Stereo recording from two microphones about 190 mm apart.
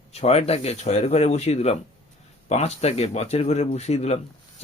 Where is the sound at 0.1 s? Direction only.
35° left (ahead or behind).